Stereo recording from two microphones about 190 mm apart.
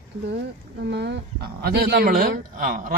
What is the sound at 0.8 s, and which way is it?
A man's voice, 65° right (ahead or behind).